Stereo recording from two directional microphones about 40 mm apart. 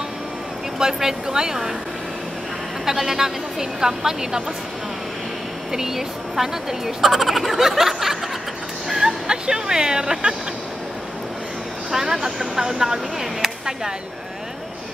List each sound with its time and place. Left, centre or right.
0.7 s speech: centre
2.8 s speech: centre
5.7 s speech: centre
11.9 s speech: centre